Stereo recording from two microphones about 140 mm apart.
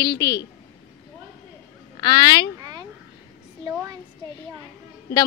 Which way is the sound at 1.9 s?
35° left (ahead or behind).